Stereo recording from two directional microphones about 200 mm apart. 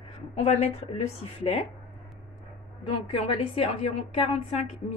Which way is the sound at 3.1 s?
30° left (ahead or behind).